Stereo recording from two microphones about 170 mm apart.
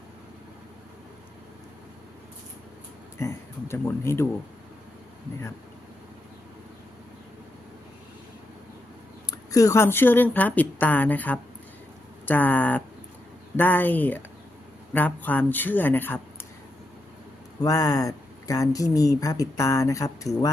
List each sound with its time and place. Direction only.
3.2 s a woman's voice: 15° left (ahead or behind)
9.5 s a woman's voice: 20° left (ahead or behind)
17.6 s speech: 20° left (ahead or behind)